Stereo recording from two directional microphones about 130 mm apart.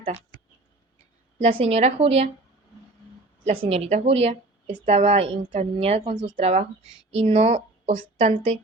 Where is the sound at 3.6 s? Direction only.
55° right (ahead or behind).